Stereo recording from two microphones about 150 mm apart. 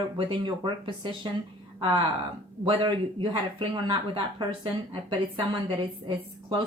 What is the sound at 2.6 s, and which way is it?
Speech, 35° right (ahead or behind).